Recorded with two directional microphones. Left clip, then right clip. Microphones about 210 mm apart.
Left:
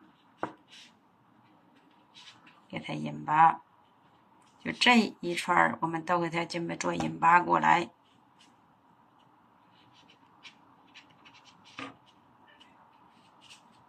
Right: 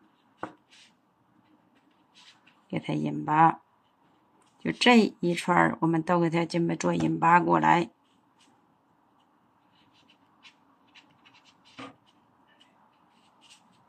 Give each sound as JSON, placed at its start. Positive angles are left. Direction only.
{"t": 2.7, "sound": "speech", "side_deg": -30}
{"t": 4.6, "sound": "speech", "side_deg": -25}